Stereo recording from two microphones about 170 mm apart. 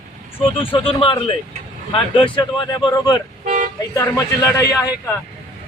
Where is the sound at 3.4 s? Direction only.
45° right (ahead or behind).